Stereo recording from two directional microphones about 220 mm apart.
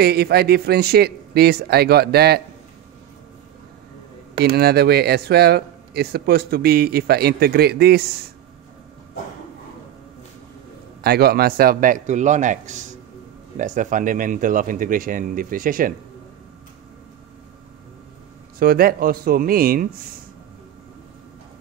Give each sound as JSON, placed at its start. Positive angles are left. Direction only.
{"t": 0.0, "sound": "speech", "side_deg": -45}
{"t": 4.4, "sound": "speech", "side_deg": -45}
{"t": 11.0, "sound": "speech", "side_deg": -45}
{"t": 18.6, "sound": "speech", "side_deg": -40}